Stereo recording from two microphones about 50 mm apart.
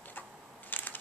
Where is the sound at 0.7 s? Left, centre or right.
Left.